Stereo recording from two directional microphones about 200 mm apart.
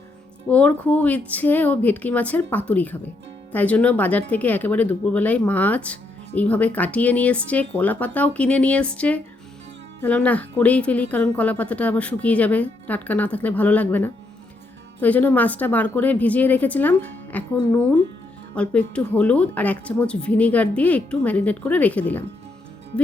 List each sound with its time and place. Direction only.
0.4 s speech: 5° left (ahead or behind)
18.5 s speech: 5° left (ahead or behind)